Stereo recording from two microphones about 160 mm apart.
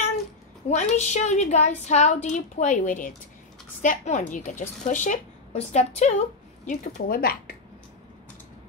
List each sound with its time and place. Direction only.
0.7 s a woman's voice: 45° left (ahead or behind); by 7.5 s 65° left (ahead or behind)